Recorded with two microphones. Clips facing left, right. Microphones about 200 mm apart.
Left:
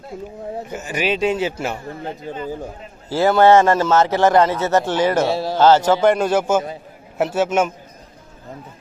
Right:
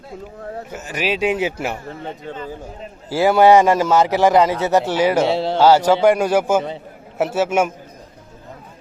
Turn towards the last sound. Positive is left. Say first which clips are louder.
# even
turn(degrees=-10)  # may be behind; listen again after turning